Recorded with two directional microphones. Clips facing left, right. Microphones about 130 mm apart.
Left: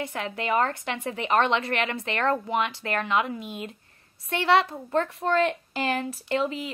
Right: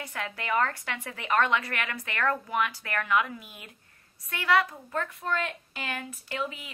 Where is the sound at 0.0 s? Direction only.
25° left (ahead or behind).